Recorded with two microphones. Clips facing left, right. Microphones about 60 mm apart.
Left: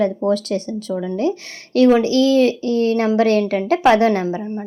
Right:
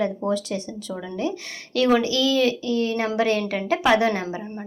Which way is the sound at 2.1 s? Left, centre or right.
Left.